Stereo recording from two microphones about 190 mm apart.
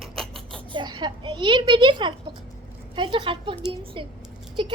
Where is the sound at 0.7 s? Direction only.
25° right (ahead or behind).